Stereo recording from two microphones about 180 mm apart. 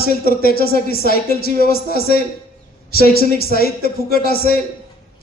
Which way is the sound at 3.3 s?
55° left (ahead or behind).